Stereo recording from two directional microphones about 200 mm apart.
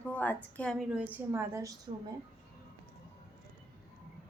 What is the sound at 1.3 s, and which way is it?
Speech, 15° right (ahead or behind).